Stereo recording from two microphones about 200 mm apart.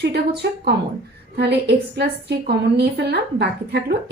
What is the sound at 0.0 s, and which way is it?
A woman's voice, 55° right (ahead or behind).